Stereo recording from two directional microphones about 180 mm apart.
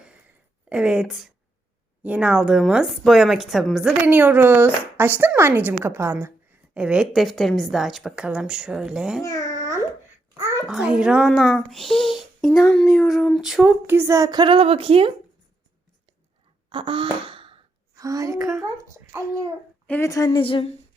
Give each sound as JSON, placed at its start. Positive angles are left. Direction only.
{"t": 0.7, "sound": "a woman's voice", "side_deg": -5}
{"t": 9.2, "sound": "babbling", "side_deg": 20}
{"t": 10.7, "sound": "speech", "side_deg": -5}
{"t": 16.6, "sound": "gasp", "side_deg": -30}
{"t": 17.9, "sound": "a woman's voice", "side_deg": -20}
{"t": 19.9, "sound": "a woman's voice", "side_deg": 15}